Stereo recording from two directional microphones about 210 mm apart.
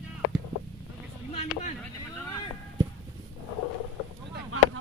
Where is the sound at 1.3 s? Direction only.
30° left (ahead or behind).